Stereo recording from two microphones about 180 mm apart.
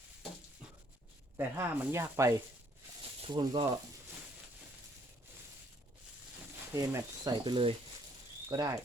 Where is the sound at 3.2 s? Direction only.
30° right (ahead or behind).